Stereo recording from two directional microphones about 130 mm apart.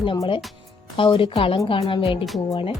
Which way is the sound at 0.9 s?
40° left (ahead or behind).